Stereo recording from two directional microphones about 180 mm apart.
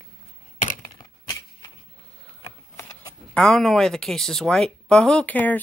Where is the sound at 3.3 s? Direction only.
5° left (ahead or behind).